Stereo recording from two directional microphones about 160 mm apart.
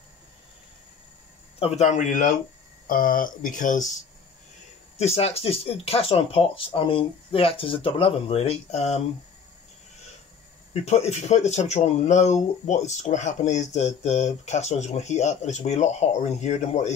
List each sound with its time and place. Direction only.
1.6 s speech: 45° left (ahead or behind)
4.9 s speech: 40° left (ahead or behind)
10.7 s speech: 40° left (ahead or behind)